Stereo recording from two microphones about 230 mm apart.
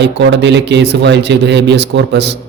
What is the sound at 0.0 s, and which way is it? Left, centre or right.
A man's voice, right.